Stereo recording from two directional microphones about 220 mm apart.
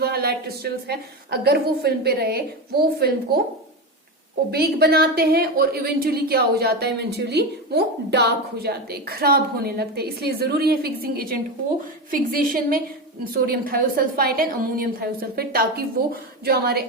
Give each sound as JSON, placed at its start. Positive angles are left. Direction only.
{"t": 0.0, "sound": "a woman's voice", "side_deg": -45}
{"t": 4.5, "sound": "a woman's voice", "side_deg": -45}